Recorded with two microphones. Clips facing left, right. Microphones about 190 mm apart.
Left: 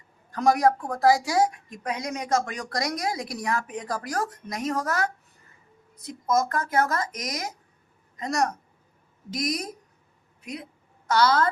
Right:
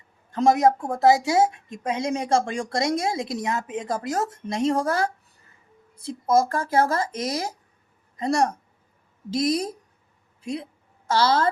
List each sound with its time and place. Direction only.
0.3 s a woman's voice: 25° right (ahead or behind)